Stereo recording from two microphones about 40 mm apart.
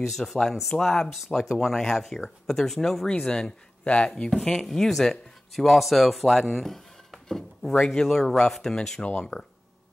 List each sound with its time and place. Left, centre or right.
0.1 s speech: centre
3.8 s speech: left
4.6 s speech: centre
9.0 s speech: left